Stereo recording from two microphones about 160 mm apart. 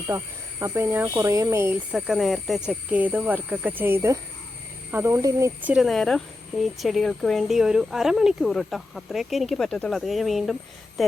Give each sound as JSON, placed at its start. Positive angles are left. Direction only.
{"t": 0.1, "sound": "speech", "side_deg": -20}
{"t": 5.7, "sound": "speech", "side_deg": 0}